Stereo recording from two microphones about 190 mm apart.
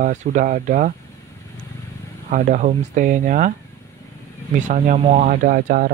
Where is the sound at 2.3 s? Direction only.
45° right (ahead or behind).